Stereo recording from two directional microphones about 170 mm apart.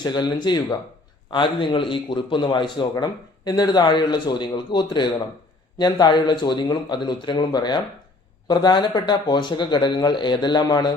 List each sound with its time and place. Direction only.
0.0 s a man's voice: 25° left (ahead or behind)